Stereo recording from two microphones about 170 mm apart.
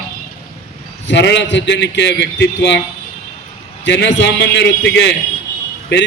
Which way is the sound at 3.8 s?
90° left.